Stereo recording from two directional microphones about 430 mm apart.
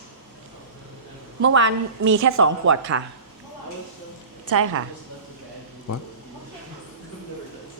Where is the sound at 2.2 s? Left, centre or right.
Right.